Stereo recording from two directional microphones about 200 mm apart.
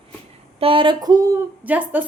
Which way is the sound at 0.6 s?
25° right (ahead or behind).